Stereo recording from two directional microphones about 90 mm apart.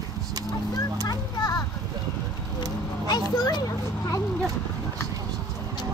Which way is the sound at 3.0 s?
50° left (ahead or behind).